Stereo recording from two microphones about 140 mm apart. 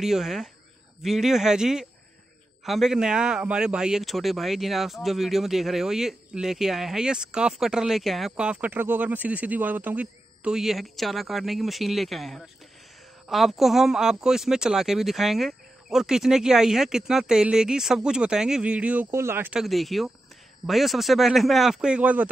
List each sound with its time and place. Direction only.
0.0 s speech: 5° right (ahead or behind)
19.6 s speech: centre (ahead or behind)